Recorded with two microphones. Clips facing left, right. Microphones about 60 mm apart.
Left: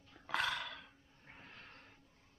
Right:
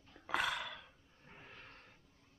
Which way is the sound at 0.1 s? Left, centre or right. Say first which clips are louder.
Right 1 dB; centre.